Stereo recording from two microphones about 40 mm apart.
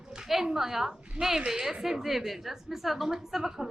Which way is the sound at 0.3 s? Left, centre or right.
Centre.